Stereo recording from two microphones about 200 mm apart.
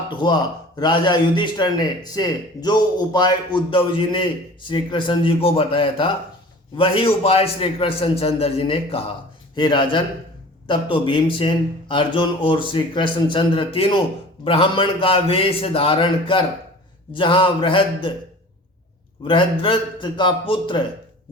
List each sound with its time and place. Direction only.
0.2 s speech: 20° left (ahead or behind)
19.2 s speech: 25° left (ahead or behind)